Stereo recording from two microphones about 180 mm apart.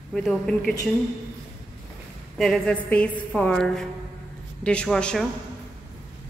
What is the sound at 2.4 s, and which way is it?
A woman's voice, 5° left (ahead or behind).